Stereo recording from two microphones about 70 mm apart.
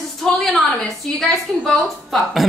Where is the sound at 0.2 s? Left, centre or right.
Centre.